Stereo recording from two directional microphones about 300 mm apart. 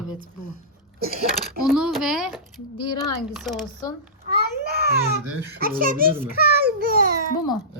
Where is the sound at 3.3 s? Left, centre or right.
Centre.